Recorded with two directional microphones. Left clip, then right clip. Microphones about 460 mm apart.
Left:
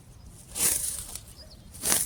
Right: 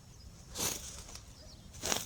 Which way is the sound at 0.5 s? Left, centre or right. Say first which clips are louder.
Left 7 dB; right.